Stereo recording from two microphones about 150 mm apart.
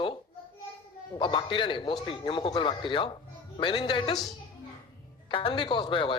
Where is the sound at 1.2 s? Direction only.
35° left (ahead or behind).